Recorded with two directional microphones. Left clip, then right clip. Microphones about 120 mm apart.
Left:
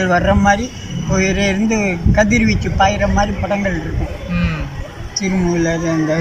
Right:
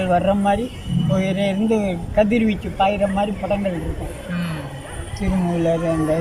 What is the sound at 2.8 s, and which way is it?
Speech, 20° right (ahead or behind).